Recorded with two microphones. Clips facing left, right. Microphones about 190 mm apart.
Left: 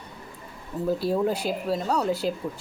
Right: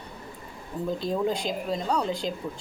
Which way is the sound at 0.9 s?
10° left (ahead or behind).